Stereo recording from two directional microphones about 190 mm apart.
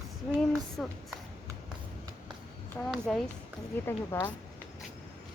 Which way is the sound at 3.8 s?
15° left (ahead or behind).